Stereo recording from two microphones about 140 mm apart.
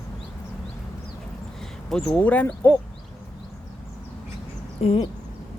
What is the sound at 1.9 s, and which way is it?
Speech, 5° left (ahead or behind).